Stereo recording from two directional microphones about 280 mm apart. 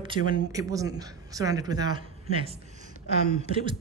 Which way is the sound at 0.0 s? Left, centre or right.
Centre.